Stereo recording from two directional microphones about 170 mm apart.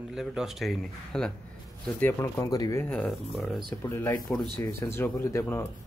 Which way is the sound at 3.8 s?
15° left (ahead or behind).